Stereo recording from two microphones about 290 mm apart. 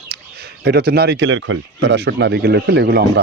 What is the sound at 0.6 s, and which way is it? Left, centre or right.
Speech, right.